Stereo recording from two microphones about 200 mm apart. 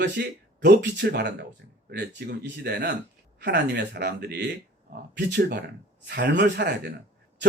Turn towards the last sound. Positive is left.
turn(degrees=-55)  # may be behind; listen again after turning